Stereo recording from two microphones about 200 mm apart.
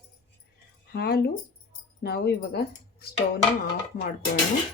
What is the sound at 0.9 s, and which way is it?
Speech, 55° left (ahead or behind).